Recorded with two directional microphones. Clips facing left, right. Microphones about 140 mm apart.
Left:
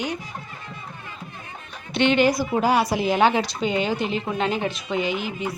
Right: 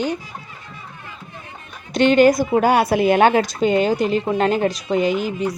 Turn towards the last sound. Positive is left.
turn(degrees=-40)  # may be behind; listen again after turning